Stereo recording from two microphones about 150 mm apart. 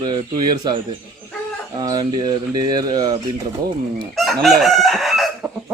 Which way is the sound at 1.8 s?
25° right (ahead or behind).